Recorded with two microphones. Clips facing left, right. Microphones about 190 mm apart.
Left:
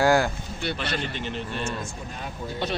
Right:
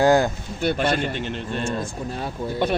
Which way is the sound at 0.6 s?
50° right (ahead or behind).